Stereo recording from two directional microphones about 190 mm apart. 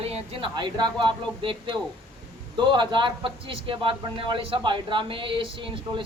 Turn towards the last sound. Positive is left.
turn(degrees=-25)  # may be behind; listen again after turning